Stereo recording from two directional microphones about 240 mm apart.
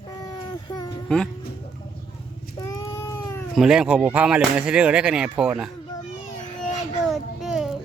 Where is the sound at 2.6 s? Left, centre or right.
Centre.